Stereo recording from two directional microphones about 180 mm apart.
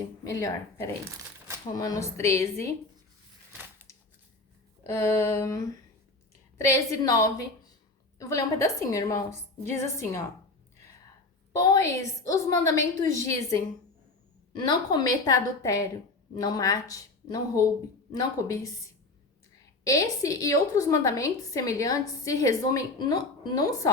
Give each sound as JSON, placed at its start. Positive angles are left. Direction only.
{"t": 0.3, "sound": "a woman's voice", "side_deg": 15}
{"t": 4.8, "sound": "a woman's voice", "side_deg": 15}
{"t": 11.5, "sound": "a woman's voice", "side_deg": 20}
{"t": 19.8, "sound": "a woman's voice", "side_deg": 20}